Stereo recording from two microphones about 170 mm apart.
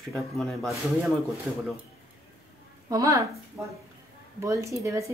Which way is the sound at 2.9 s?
20° right (ahead or behind).